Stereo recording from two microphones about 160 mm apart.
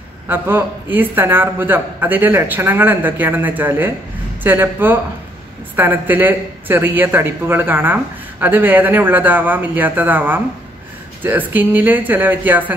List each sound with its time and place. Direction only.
0.3 s speech: 15° right (ahead or behind)